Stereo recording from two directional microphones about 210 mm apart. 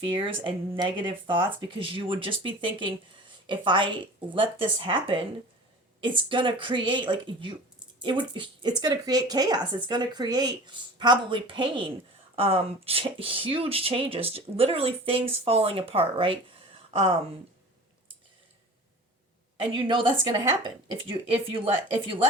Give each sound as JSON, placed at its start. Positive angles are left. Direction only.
{"t": 0.7, "sound": "speech", "side_deg": -20}
{"t": 19.7, "sound": "speech", "side_deg": -25}